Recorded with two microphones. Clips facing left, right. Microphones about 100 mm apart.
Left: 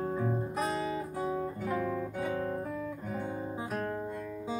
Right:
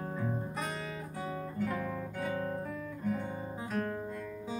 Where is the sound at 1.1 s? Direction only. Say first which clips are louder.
Left 3 dB; 15° left (ahead or behind).